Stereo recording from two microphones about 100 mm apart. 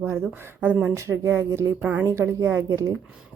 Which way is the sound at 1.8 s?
15° right (ahead or behind).